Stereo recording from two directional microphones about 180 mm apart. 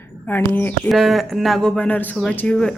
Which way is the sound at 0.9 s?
Centre (ahead or behind).